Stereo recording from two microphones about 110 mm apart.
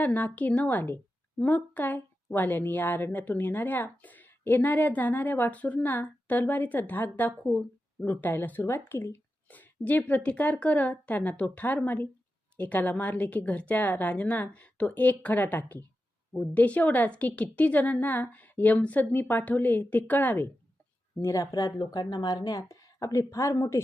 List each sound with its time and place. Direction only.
0.0 s a woman's voice: 15° left (ahead or behind)
21.2 s speech: 30° left (ahead or behind)